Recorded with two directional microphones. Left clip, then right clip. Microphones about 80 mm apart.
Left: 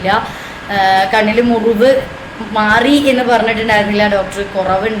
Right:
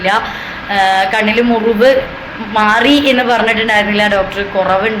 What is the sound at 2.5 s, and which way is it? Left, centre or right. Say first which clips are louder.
A woman's voice: right 1 dB; left.